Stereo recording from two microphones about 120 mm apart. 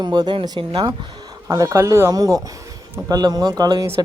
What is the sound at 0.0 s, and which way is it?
Speech, 35° right (ahead or behind).